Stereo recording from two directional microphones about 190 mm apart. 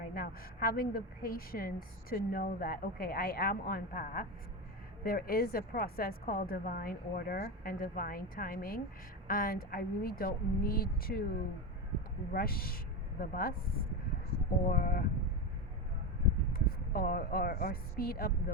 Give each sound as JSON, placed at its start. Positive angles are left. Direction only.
{"t": 0.1, "sound": "a woman's voice", "side_deg": 50}
{"t": 12.3, "sound": "speech", "side_deg": 50}
{"t": 14.7, "sound": "a woman's voice", "side_deg": 50}
{"t": 16.5, "sound": "a woman's voice", "side_deg": 50}